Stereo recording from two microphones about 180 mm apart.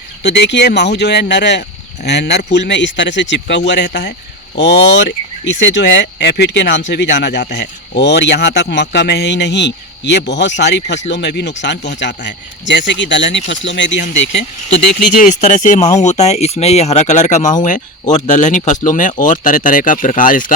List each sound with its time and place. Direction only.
0.2 s a man's voice: 70° left (ahead or behind)
15.2 s speech: 45° left (ahead or behind)